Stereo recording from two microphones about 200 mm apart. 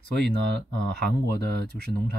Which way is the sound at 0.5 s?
60° right (ahead or behind).